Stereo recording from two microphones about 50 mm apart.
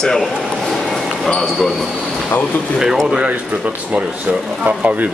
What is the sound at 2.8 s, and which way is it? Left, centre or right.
Speech, centre.